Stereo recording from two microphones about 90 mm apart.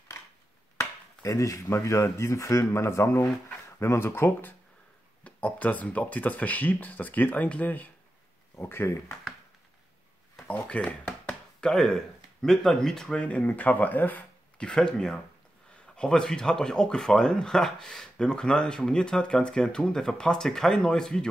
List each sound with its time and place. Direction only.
0.7 s speech: 35° left (ahead or behind)
10.4 s speech: 15° left (ahead or behind)